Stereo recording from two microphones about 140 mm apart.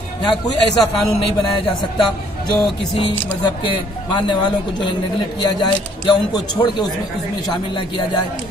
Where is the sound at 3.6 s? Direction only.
35° left (ahead or behind).